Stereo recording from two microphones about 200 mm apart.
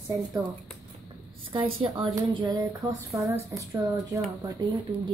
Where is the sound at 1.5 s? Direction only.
25° right (ahead or behind).